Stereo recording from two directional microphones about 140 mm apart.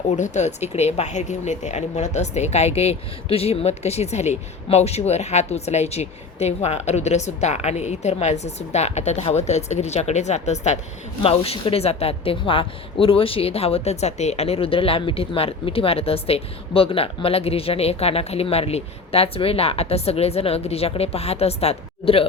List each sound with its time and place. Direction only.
0.2 s speech: 55° left (ahead or behind)
11.2 s speech: 45° left (ahead or behind)